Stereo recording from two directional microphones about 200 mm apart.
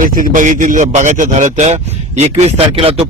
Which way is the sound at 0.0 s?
40° right (ahead or behind).